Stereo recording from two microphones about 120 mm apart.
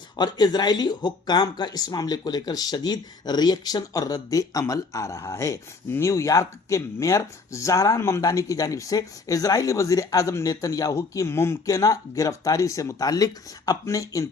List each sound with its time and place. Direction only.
0.2 s speech: 35° left (ahead or behind)